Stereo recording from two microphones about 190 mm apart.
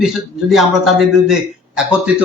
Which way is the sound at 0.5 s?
Centre (ahead or behind).